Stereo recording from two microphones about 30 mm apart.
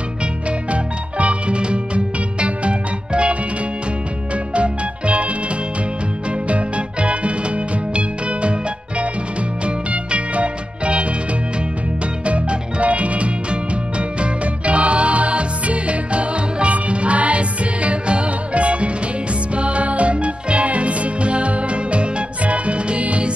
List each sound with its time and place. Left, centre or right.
0.7 s music: right
1.6 s music: right
4.6 s music: right
6.5 s music: right
10.1 s music: right
12.3 s music: right